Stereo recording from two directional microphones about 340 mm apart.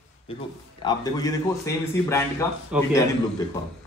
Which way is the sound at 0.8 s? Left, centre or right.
Centre.